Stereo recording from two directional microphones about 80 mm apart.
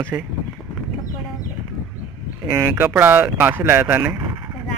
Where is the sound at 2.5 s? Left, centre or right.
Right.